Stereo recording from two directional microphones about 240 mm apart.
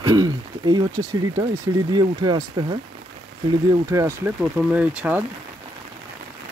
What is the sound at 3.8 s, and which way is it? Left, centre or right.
Speech, centre.